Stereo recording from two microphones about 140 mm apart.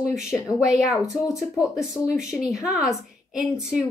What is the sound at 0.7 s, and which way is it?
A woman's voice, centre (ahead or behind).